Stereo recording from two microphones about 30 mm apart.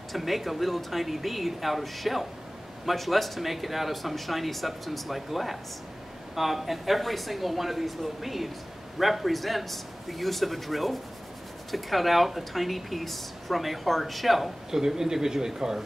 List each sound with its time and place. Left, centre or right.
0.1 s speech: centre
14.7 s speech: centre